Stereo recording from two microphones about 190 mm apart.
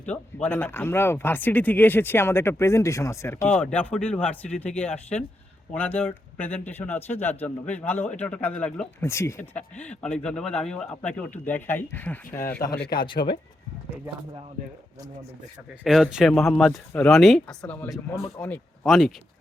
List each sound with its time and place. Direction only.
0.1 s speech: 5° left (ahead or behind)
13.2 s speech: 55° left (ahead or behind)
15.8 s speech: centre (ahead or behind)